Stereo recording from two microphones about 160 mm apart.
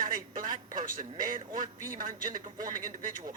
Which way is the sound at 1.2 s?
60° right (ahead or behind).